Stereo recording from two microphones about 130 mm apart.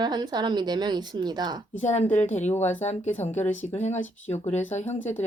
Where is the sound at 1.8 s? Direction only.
60° left (ahead or behind).